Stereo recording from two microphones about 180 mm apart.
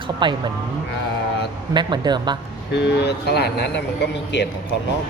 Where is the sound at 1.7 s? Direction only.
25° right (ahead or behind).